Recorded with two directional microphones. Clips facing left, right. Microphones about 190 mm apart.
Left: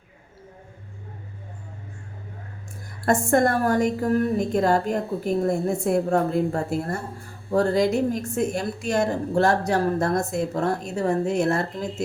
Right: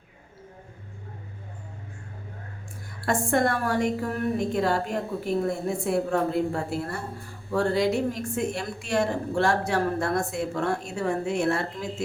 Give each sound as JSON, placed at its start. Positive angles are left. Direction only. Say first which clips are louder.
{"t": 3.1, "sound": "a woman's voice", "louder": "left 4 dB", "side_deg": 45}